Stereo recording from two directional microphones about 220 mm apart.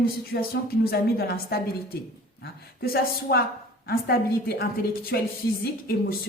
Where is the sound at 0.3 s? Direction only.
50° left (ahead or behind).